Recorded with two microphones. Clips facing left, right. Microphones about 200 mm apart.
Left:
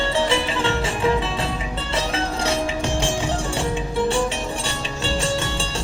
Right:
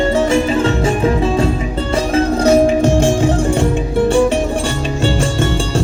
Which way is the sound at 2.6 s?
40° right (ahead or behind).